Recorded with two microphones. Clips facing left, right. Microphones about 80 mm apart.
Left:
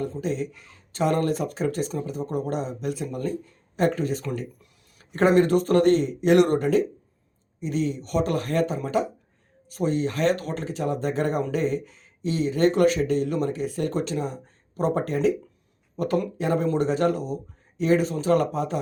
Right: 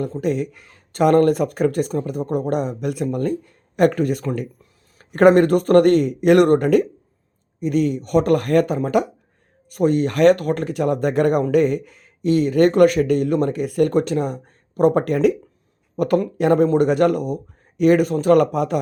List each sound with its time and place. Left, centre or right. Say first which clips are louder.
0.0 s speech: right 6 dB; right